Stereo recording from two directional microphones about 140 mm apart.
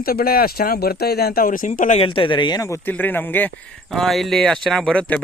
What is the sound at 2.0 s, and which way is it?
A man's voice, 40° left (ahead or behind).